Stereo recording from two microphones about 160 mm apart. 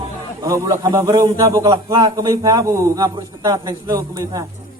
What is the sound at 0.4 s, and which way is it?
A man's voice, 20° right (ahead or behind).